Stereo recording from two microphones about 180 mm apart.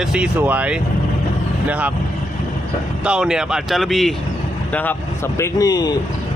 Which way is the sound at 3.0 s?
5° right (ahead or behind).